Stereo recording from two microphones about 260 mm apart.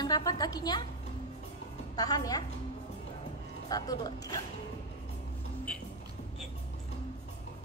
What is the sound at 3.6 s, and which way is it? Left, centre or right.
Speech, centre.